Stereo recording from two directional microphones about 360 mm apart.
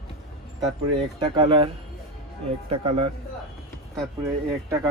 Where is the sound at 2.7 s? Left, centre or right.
Centre.